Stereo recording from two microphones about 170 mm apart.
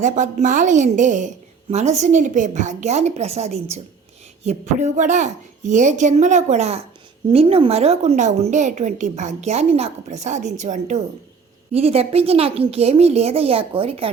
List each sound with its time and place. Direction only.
0.0 s a woman's voice: 45° right (ahead or behind)